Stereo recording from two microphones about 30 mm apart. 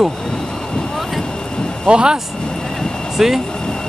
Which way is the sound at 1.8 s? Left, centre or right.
Right.